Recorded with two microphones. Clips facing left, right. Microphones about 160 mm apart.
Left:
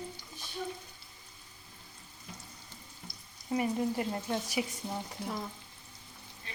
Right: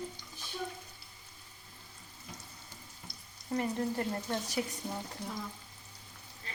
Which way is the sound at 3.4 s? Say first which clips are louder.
Left 2 dB; 10° left (ahead or behind).